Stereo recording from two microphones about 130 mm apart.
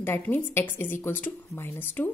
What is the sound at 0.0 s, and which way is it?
A woman's voice, 15° left (ahead or behind).